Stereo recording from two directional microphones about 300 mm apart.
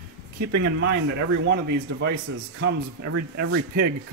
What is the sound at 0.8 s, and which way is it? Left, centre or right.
Speech, right.